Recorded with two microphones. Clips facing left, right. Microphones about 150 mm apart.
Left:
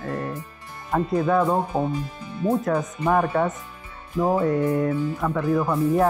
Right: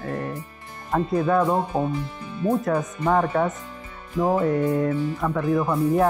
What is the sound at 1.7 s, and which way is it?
Speech, 15° right (ahead or behind).